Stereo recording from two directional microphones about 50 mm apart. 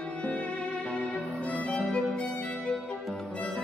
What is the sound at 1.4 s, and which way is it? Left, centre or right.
Violin, left.